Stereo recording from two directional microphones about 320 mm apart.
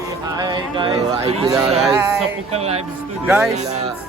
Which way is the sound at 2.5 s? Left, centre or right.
Centre.